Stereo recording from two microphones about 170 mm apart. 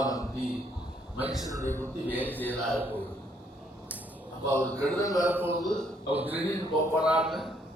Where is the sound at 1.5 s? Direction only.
20° right (ahead or behind).